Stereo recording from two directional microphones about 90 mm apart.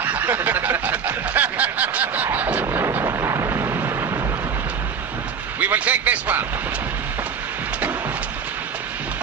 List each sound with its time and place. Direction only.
0.0 s snicker: 20° right (ahead or behind)
2.8 s a sound: 35° right (ahead or behind)
5.5 s speech: 20° right (ahead or behind)